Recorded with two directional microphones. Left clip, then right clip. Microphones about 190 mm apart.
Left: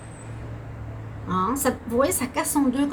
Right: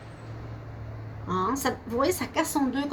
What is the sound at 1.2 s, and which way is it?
A woman's voice, 40° right (ahead or behind).